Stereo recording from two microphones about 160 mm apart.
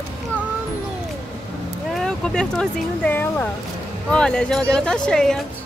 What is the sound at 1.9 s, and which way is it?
Speech, 5° left (ahead or behind).